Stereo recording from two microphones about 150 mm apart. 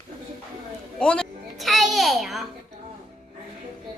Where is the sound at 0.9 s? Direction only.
5° left (ahead or behind).